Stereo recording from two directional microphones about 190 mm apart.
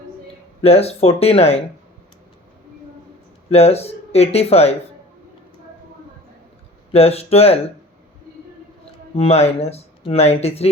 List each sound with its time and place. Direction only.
0.6 s speech: 30° left (ahead or behind)
3.5 s speech: 35° left (ahead or behind)
6.9 s speech: 30° left (ahead or behind)
9.1 s speech: 30° left (ahead or behind)